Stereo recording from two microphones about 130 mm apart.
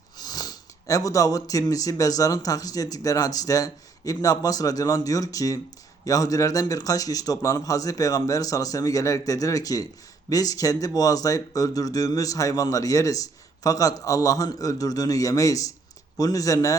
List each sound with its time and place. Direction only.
0.2 s speech: 30° left (ahead or behind)